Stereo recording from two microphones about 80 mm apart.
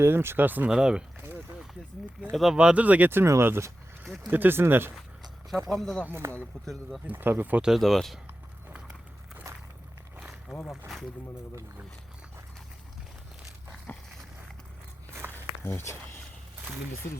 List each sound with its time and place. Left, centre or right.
0.0 s speech: right
0.7 s speech: centre
2.3 s speech: centre
2.6 s speech: centre; by 3.7 s right
4.0 s speech: centre
4.3 s speech: right
5.6 s speech: centre
6.0 s speech: right
7.8 s speech: centre
10.2 s a sound: centre
10.7 s speech: centre
13.9 s dog: left
15.1 s walk: right
15.6 s speech: left